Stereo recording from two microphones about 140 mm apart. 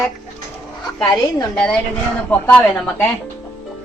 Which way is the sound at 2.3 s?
10° left (ahead or behind).